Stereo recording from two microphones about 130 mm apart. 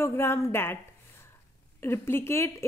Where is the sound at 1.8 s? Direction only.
20° left (ahead or behind).